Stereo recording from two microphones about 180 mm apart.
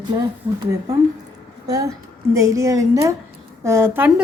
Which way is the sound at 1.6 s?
20° right (ahead or behind).